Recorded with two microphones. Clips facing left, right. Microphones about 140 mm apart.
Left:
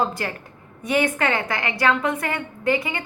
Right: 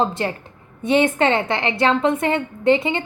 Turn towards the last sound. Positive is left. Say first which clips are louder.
# right 6 dB
turn(degrees=-25)  # may be behind; listen again after turning